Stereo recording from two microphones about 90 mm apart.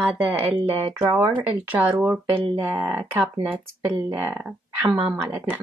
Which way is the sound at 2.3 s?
60° right (ahead or behind).